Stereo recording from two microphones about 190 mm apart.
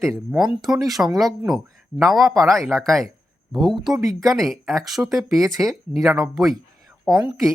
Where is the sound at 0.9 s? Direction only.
Centre (ahead or behind).